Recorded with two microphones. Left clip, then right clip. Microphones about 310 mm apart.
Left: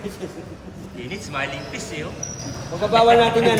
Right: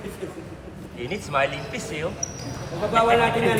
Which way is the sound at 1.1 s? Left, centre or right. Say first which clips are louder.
Right 4 dB; centre.